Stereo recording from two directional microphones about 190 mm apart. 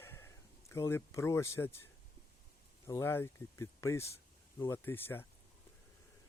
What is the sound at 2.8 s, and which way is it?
Speech, 15° left (ahead or behind).